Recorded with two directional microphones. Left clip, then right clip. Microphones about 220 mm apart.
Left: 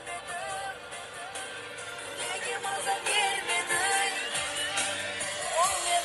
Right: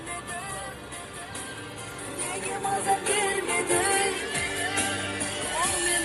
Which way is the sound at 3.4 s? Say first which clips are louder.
Right 3 dB; 20° right (ahead or behind).